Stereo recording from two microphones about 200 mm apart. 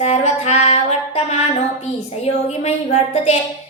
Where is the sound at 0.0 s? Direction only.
35° left (ahead or behind).